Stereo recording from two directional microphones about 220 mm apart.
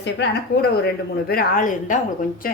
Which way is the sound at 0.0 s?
50° left (ahead or behind).